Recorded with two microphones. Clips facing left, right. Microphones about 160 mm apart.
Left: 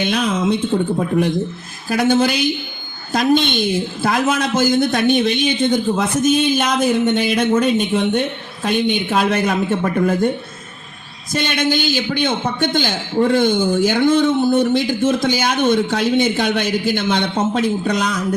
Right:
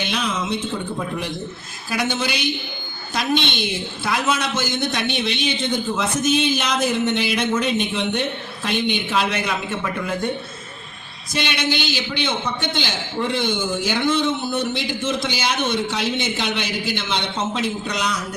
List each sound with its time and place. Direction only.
0.0 s a man's voice: 50° left (ahead or behind)
1.9 s a man's voice: 45° left (ahead or behind)
11.3 s a man's voice: 50° left (ahead or behind)